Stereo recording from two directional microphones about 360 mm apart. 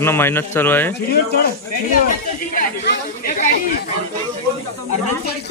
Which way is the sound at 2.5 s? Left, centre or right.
Left.